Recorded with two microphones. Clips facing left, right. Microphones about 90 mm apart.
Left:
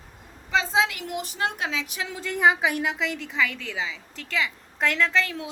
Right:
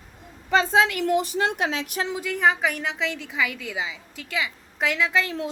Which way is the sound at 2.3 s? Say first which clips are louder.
Left 2 dB; 5° left (ahead or behind).